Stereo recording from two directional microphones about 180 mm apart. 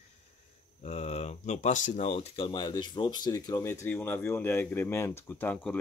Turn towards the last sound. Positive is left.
turn(degrees=10)  # may be behind; listen again after turning